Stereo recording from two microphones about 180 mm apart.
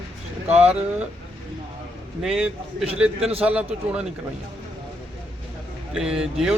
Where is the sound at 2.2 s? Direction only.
5° right (ahead or behind).